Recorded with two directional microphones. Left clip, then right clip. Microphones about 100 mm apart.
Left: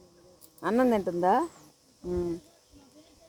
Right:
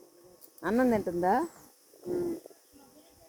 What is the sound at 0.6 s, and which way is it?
Speech, centre (ahead or behind).